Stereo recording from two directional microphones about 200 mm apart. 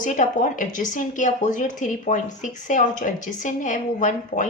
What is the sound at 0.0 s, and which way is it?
Speech, 40° left (ahead or behind).